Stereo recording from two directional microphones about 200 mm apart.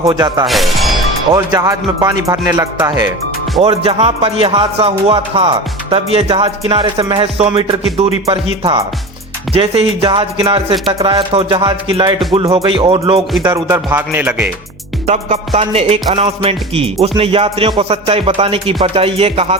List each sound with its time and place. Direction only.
0.0 s music: 20° right (ahead or behind)
0.4 s speech: centre (ahead or behind)
1.3 s speech: 20° right (ahead or behind)
3.8 s music: 30° right (ahead or behind)
13.4 s speech: 15° right (ahead or behind)
15.0 s music: 30° right (ahead or behind)